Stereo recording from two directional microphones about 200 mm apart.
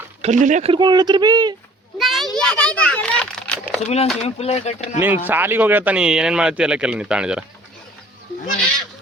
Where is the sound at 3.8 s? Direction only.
30° left (ahead or behind).